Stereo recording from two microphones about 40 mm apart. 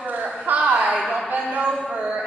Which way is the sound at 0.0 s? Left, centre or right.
Right.